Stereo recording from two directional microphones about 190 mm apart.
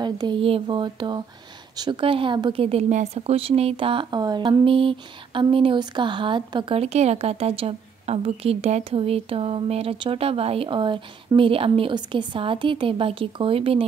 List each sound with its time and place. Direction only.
0.0 s speech: 25° right (ahead or behind)